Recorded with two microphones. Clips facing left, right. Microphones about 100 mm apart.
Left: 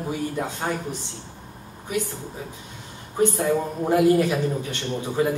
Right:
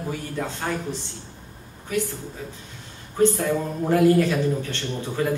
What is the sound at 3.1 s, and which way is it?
A man's voice, 20° left (ahead or behind).